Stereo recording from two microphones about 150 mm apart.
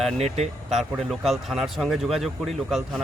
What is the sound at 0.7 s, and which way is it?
A man's voice, centre (ahead or behind).